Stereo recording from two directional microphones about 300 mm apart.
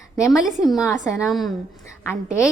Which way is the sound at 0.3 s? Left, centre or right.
Centre.